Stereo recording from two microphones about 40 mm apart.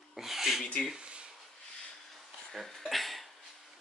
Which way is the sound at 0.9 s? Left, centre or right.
Right.